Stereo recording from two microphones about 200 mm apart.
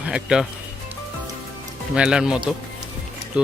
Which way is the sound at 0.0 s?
5° right (ahead or behind).